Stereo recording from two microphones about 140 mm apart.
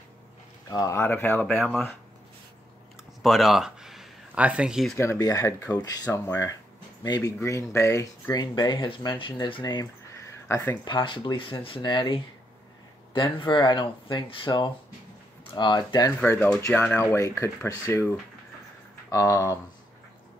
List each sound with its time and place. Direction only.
0.7 s speech: 25° left (ahead or behind)
3.2 s speech: centre (ahead or behind)
4.9 s speech: 20° left (ahead or behind)
10.5 s speech: 20° left (ahead or behind)
10.9 s speech: 35° left (ahead or behind)
16.7 s speech: 15° left (ahead or behind)